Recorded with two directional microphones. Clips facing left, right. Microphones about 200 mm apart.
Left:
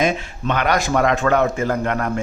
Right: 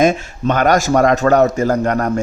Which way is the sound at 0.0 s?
45° right (ahead or behind).